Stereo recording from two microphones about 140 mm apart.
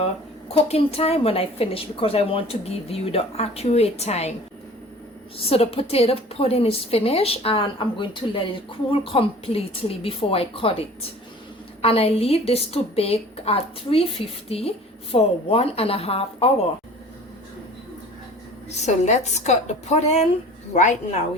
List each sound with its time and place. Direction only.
0.0 s a woman's voice: 45° left (ahead or behind)
5.4 s a woman's voice: 45° left (ahead or behind)
11.8 s a woman's voice: 45° left (ahead or behind)
18.7 s a woman's voice: 55° left (ahead or behind)